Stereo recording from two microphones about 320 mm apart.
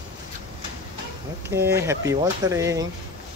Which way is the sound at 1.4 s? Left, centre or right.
Centre.